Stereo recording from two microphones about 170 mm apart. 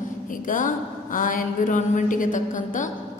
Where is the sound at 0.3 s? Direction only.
55° left (ahead or behind).